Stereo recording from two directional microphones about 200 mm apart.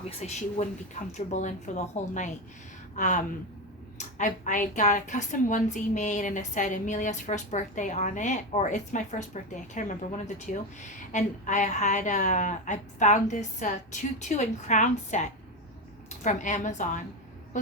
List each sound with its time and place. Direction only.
0.2 s a woman's voice: 35° left (ahead or behind)